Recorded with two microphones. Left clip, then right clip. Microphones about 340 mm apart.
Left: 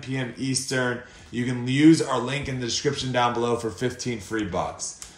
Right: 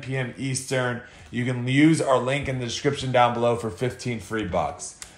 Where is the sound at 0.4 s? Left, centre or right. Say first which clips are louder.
Left 1 dB; right.